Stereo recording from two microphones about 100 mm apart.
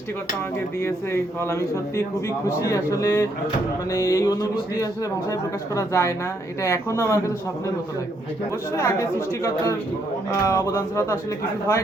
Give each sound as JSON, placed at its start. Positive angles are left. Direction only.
{"t": 0.8, "sound": "a man's voice", "side_deg": 25}
{"t": 2.6, "sound": "a sound", "side_deg": 30}
{"t": 6.6, "sound": "a man's voice", "side_deg": 30}
{"t": 8.7, "sound": "a man's voice", "side_deg": 30}